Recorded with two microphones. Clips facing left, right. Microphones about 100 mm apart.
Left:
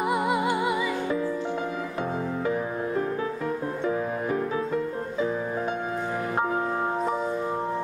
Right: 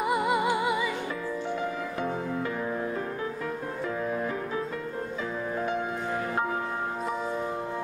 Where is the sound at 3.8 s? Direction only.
20° left (ahead or behind).